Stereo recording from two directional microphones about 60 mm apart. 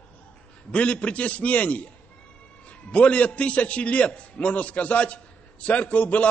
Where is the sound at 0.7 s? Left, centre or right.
Centre.